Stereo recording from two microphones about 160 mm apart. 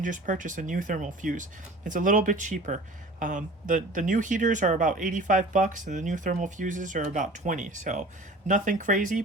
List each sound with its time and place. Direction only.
0.0 s speech: 55° right (ahead or behind)